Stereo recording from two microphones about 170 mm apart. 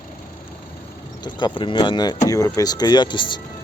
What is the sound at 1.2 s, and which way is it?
Speech, 25° left (ahead or behind).